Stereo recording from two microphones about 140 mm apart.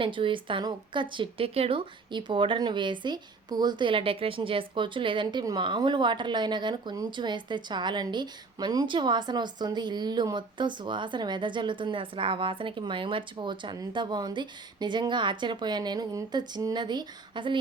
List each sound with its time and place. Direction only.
0.0 s speech: 35° right (ahead or behind)